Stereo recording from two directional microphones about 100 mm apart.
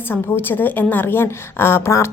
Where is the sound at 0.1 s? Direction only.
20° left (ahead or behind).